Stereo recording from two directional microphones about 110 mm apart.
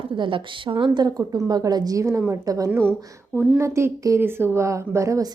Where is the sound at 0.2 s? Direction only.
50° right (ahead or behind); by 2.6 s 30° right (ahead or behind).